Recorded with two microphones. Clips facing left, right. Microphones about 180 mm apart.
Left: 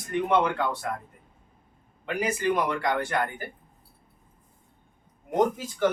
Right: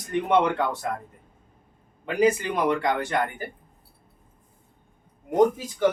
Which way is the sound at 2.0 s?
20° right (ahead or behind).